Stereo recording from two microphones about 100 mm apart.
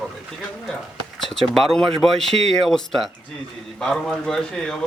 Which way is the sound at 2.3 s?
90° right.